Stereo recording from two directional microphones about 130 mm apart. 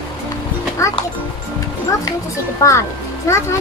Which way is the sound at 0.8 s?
25° left (ahead or behind).